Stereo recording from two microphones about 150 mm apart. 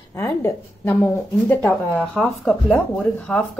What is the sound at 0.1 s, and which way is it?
A woman's voice, 15° left (ahead or behind).